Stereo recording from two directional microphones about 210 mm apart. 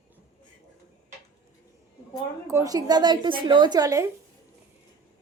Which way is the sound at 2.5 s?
15° right (ahead or behind).